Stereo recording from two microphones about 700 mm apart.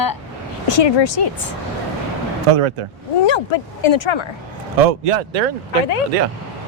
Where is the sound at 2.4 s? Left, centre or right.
Right.